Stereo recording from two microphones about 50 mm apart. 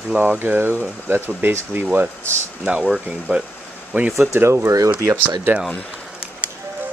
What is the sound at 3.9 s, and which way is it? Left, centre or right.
Speech, right.